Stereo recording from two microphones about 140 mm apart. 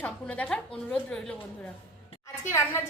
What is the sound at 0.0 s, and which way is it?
A woman's voice, 10° left (ahead or behind).